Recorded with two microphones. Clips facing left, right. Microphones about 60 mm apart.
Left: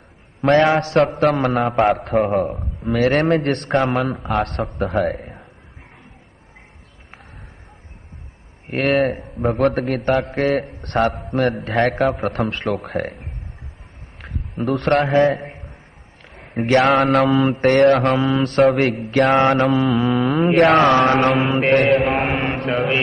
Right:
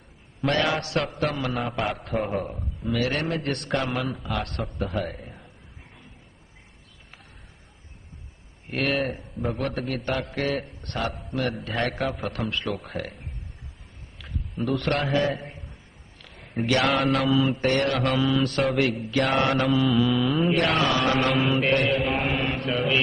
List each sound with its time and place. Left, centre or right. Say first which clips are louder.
0.6 s mantra: left 11 dB; left
2.0 s mantra: left 9 dB; left
8.8 s mantra: left 9 dB; left
9.8 s mantra: left 9 dB; left
12.9 s a man's voice: left 9 dB; left
16.3 s a sound: left 8 dB; left
16.8 s mantra: left 7 dB; left
18.2 s mantra: left 4 dB; left
19.0 s mantra: left 12 dB; left
20.1 s mantra: left 5 dB; left
21.4 s mantra: left 4 dB; left
21.6 s mantra: left 8 dB; left